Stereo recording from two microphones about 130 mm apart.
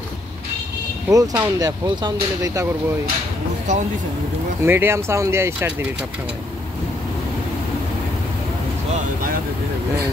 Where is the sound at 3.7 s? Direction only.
65° right (ahead or behind).